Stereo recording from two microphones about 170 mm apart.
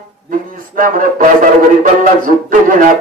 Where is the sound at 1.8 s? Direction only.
50° right (ahead or behind).